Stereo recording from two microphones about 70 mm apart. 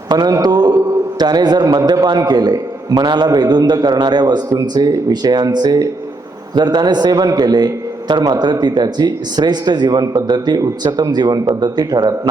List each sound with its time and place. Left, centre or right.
0.1 s a man's voice: right
6.6 s a man's voice: right
10.6 s speech: right
11.6 s a man's voice: right